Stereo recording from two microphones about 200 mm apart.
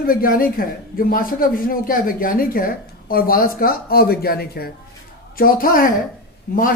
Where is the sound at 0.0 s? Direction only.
45° left (ahead or behind).